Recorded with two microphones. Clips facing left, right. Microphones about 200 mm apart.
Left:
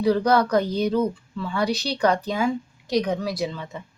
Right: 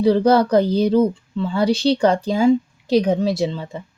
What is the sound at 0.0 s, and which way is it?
A woman's voice, 30° right (ahead or behind).